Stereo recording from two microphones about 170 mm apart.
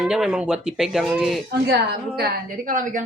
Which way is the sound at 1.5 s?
70° right (ahead or behind).